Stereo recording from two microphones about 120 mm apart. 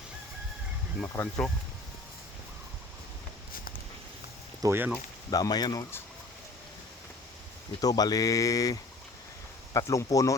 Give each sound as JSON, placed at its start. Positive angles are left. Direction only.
{"t": 1.0, "sound": "speech", "side_deg": 20}
{"t": 4.6, "sound": "speech", "side_deg": -20}
{"t": 5.3, "sound": "speech", "side_deg": 35}
{"t": 7.8, "sound": "speech", "side_deg": 30}